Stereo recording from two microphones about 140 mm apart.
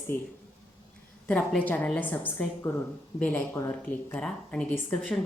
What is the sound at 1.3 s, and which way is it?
Speech, 10° left (ahead or behind).